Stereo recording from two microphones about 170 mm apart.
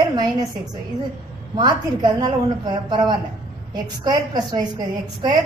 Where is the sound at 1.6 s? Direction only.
25° right (ahead or behind).